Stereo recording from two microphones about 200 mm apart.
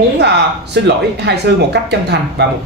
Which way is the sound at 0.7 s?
60° right (ahead or behind).